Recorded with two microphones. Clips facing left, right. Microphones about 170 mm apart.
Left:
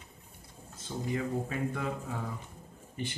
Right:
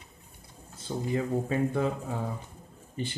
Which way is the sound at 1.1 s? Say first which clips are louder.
Right 5 dB; 30° right (ahead or behind).